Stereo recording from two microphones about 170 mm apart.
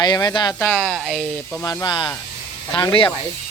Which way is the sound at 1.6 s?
25° left (ahead or behind).